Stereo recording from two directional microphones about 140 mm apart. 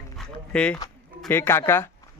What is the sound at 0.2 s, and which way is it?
Speech, 10° left (ahead or behind).